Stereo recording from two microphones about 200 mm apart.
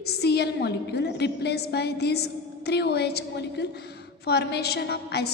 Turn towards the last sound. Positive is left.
turn(degrees=55)  # may be behind; listen again after turning